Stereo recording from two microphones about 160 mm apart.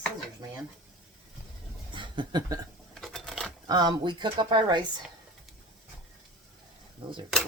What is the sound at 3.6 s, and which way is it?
Speech, 25° right (ahead or behind).